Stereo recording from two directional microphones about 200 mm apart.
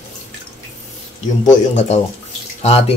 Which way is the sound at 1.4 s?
35° left (ahead or behind).